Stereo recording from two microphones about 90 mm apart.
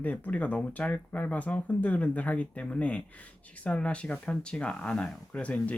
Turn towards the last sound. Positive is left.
turn(degrees=15)  # may be behind; listen again after turning